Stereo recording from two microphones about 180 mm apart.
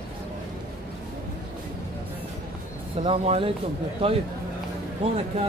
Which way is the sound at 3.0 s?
30° right (ahead or behind).